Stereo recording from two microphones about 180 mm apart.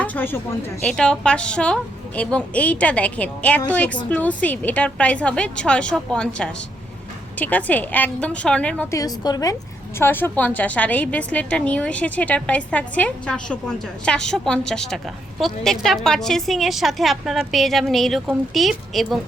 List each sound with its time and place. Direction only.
0.0 s a sound: 10° left (ahead or behind)
0.9 s a woman's voice: 5° left (ahead or behind)
9.0 s a woman's voice: 20° left (ahead or behind); by 19.2 s centre (ahead or behind)